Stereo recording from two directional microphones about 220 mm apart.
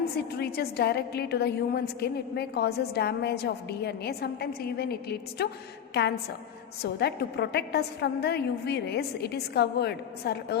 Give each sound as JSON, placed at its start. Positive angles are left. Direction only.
{"t": 0.2, "sound": "a woman's voice", "side_deg": 45}